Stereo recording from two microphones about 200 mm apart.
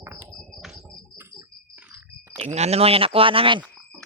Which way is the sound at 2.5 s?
30° right (ahead or behind).